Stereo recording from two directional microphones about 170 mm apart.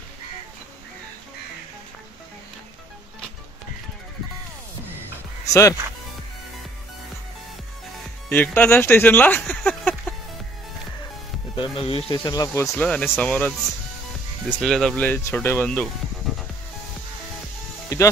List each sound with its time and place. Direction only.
5.5 s speech: 15° left (ahead or behind)
8.3 s speech: 10° left (ahead or behind)
11.5 s speech: 30° left (ahead or behind); by 13.6 s 10° left (ahead or behind)
14.6 s speech: 5° left (ahead or behind)
17.8 s music: 20° left (ahead or behind)